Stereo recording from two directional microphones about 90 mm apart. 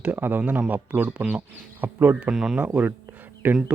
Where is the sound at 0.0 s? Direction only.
20° right (ahead or behind).